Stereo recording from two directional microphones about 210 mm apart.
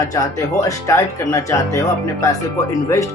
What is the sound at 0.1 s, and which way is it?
Speech, 15° left (ahead or behind).